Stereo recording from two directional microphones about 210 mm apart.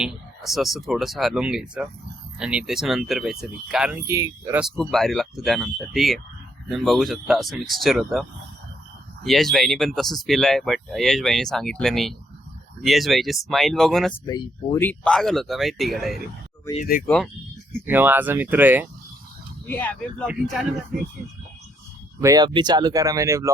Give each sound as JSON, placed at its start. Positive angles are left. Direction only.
{"t": 0.0, "sound": "speech", "side_deg": 0}
{"t": 4.6, "sound": "speech", "side_deg": 0}
{"t": 14.3, "sound": "speech", "side_deg": 15}
{"t": 16.7, "sound": "speech", "side_deg": 40}
{"t": 17.8, "sound": "speech", "side_deg": -10}
{"t": 19.6, "sound": "speech", "side_deg": 10}
{"t": 22.2, "sound": "speech", "side_deg": -15}